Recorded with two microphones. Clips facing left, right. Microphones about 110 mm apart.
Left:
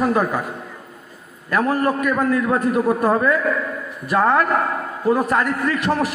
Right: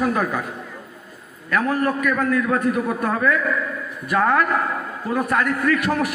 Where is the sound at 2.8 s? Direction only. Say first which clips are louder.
Left 4 dB; 25° left (ahead or behind).